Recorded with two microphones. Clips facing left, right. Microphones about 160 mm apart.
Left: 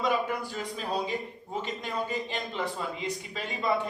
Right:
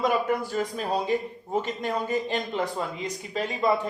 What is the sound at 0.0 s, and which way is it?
Speech, 50° right (ahead or behind).